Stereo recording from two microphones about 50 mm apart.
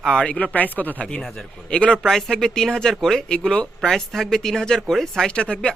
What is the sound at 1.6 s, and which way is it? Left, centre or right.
Speech, centre.